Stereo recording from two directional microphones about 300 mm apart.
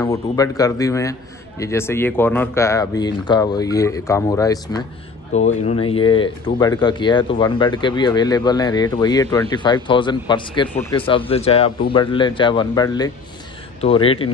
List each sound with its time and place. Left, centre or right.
0.0 s speech: centre
5.3 s speech: left